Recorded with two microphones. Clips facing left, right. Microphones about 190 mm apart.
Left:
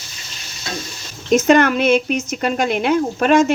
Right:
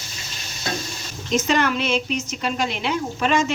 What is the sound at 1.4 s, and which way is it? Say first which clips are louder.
A woman's voice: left 9 dB; 55° left (ahead or behind).